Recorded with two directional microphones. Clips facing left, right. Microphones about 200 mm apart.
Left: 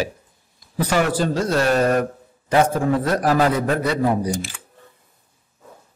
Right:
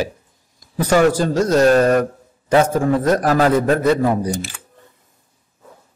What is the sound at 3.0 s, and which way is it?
Speech, 45° right (ahead or behind).